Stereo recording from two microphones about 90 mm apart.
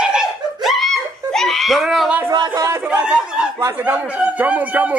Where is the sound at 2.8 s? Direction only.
10° right (ahead or behind).